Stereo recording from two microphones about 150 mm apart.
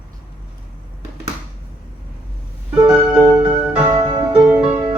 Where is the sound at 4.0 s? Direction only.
35° right (ahead or behind).